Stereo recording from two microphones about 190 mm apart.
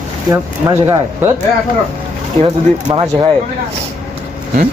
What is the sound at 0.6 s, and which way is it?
Speech, 15° right (ahead or behind).